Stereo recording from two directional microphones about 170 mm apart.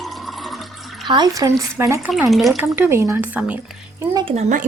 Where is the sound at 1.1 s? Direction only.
20° right (ahead or behind).